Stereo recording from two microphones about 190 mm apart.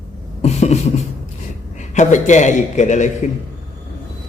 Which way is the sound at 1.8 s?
40° left (ahead or behind).